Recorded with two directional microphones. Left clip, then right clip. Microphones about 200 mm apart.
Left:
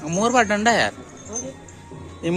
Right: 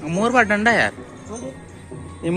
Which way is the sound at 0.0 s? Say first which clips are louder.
Right 1 dB; 20° left (ahead or behind).